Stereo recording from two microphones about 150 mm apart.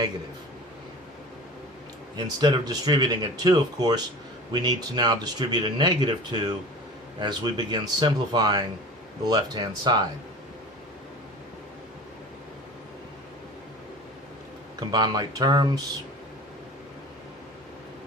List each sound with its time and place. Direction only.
2.1 s speech: 25° right (ahead or behind)
14.8 s speech: 25° right (ahead or behind)